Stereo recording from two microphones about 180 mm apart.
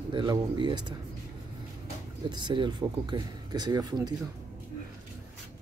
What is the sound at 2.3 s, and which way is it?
Speech, 25° right (ahead or behind).